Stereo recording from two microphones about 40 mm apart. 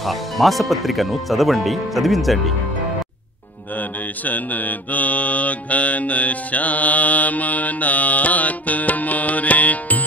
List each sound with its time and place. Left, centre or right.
0.0 s speech: centre
4.2 s mantra: left